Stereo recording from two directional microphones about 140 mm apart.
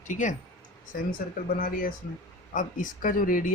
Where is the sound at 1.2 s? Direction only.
80° left.